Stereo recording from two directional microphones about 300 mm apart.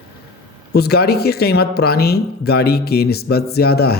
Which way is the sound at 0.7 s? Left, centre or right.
Left.